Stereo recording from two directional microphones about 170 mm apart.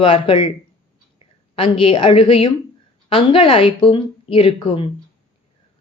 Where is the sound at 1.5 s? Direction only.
35° left (ahead or behind).